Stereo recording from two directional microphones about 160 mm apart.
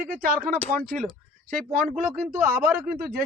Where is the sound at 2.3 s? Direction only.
15° right (ahead or behind).